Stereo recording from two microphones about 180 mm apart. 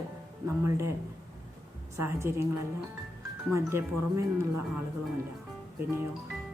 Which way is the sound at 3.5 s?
15° right (ahead or behind).